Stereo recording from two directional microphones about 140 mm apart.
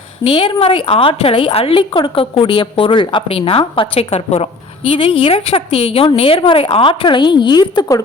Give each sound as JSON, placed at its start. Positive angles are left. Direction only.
{"t": 0.3, "sound": "a woman's voice", "side_deg": 40}